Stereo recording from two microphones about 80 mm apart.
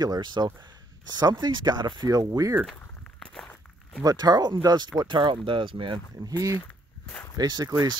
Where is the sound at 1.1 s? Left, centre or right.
Right.